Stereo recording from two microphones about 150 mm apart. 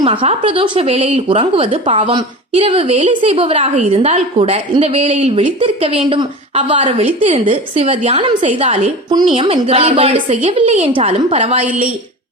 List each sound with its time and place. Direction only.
0.0 s a woman's voice: 40° right (ahead or behind)